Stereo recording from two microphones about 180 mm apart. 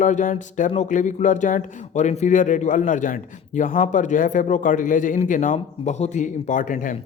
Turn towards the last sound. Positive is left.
turn(degrees=45)  # may be behind; listen again after turning